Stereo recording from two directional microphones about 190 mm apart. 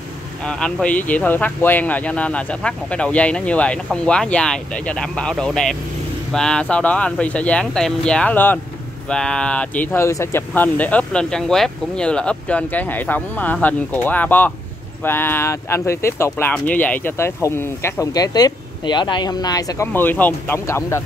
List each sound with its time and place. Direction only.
0.5 s speech: 5° left (ahead or behind)